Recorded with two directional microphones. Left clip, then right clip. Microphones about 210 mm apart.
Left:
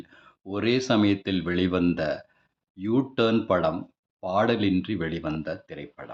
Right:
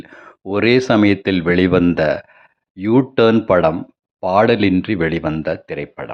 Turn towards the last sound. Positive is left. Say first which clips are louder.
# right 13 dB
turn(degrees=-40)  # may be behind; listen again after turning